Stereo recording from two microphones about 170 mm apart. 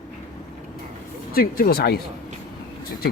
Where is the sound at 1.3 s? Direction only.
60° left (ahead or behind).